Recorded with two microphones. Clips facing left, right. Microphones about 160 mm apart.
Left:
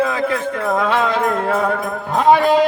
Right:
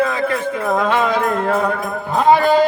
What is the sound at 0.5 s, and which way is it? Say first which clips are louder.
Music: right 1 dB; 5° right (ahead or behind).